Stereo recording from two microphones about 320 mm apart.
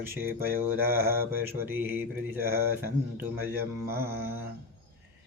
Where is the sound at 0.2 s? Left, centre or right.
Centre.